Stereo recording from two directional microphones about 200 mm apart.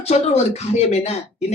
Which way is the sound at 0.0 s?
35° left (ahead or behind).